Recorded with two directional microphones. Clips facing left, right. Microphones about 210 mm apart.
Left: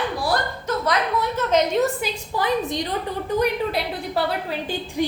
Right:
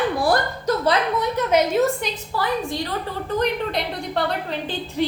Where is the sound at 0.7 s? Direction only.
35° right (ahead or behind).